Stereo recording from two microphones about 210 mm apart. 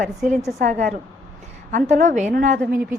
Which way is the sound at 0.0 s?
35° right (ahead or behind).